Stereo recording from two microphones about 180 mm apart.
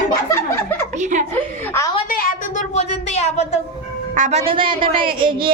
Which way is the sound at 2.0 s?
50° left (ahead or behind).